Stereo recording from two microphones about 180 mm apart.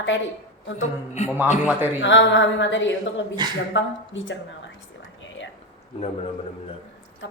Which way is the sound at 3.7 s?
90° left.